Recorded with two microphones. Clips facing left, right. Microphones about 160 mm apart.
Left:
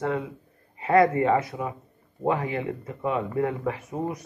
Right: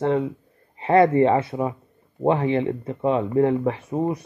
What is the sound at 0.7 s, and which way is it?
Speech, 30° right (ahead or behind).